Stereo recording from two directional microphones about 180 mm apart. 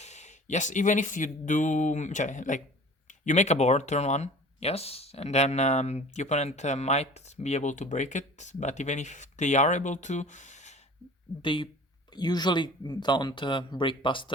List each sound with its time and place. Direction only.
0.0 s speech: 40° left (ahead or behind)
11.4 s speech: 25° left (ahead or behind)